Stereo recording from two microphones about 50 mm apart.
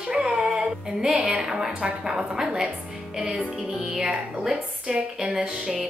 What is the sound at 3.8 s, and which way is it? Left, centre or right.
A woman's voice, centre.